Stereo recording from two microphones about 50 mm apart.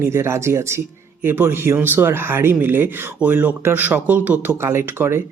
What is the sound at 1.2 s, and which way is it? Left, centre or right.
Speech, right.